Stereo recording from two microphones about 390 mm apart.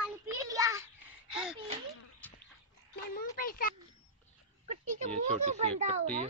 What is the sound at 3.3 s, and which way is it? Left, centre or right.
Speech, left.